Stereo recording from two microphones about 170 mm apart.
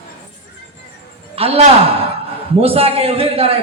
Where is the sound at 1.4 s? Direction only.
35° right (ahead or behind).